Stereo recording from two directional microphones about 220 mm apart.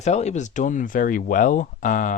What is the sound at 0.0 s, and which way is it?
Speech, 30° left (ahead or behind).